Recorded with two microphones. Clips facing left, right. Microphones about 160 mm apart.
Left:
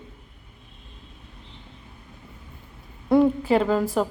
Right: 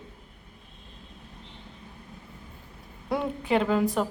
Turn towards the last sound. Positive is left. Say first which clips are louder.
# left 3 dB
turn(degrees=0)  # may be behind; listen again after turning